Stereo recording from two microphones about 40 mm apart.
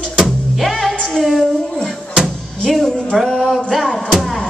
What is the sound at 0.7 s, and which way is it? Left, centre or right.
Music, centre.